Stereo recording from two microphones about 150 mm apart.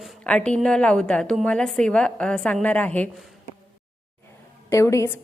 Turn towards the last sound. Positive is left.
turn(degrees=15)  # may be behind; listen again after turning